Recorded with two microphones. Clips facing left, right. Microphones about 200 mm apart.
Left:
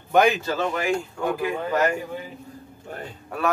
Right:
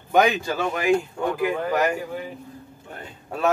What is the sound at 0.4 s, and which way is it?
Speech, 10° right (ahead or behind).